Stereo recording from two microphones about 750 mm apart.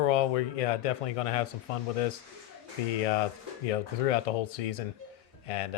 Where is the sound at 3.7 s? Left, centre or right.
Left.